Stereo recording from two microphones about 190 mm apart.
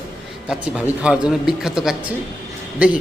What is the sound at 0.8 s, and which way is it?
A man's voice, 5° right (ahead or behind).